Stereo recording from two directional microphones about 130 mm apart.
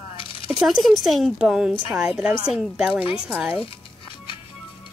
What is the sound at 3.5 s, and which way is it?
Music, 40° left (ahead or behind).